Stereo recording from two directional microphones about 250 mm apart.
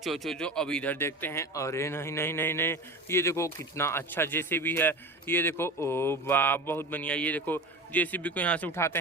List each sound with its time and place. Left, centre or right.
0.0 s speech: centre